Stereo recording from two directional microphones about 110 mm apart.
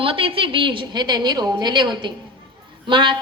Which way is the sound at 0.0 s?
55° right (ahead or behind).